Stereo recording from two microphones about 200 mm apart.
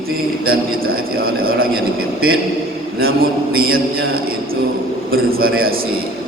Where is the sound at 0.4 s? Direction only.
50° right (ahead or behind).